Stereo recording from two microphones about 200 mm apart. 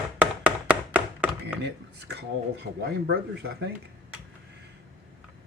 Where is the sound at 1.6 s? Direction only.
60° right (ahead or behind).